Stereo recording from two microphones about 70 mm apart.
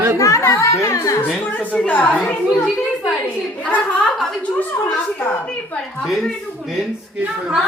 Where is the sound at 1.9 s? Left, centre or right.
Left.